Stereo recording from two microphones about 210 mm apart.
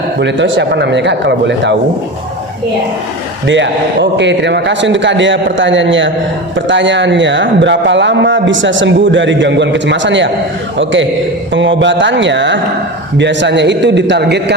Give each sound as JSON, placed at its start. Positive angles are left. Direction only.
{"t": 0.2, "sound": "a man's voice", "side_deg": -60}
{"t": 3.4, "sound": "a man's voice", "side_deg": -60}
{"t": 11.5, "sound": "a man's voice", "side_deg": -60}